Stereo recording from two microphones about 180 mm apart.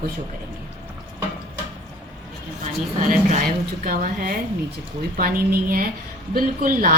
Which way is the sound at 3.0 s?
50° right (ahead or behind).